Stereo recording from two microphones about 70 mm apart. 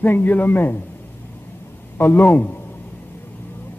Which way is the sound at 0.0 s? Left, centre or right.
Left.